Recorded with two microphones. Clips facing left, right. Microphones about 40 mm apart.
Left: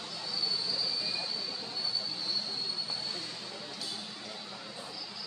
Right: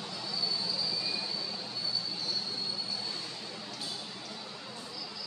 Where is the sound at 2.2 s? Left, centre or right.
Centre.